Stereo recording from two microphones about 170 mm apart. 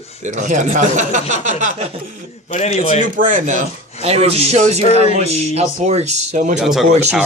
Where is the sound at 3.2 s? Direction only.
50° right (ahead or behind).